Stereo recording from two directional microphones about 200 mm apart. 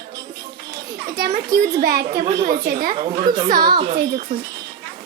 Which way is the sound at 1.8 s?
50° right (ahead or behind).